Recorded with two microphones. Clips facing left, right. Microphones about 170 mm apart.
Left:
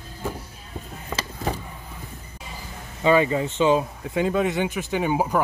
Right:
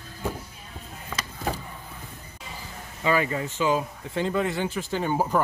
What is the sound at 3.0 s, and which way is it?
Speech, 25° left (ahead or behind).